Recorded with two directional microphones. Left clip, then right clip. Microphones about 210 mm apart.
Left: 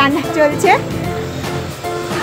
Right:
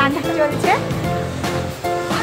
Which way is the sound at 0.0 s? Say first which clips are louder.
Left 4 dB; 35° left (ahead or behind).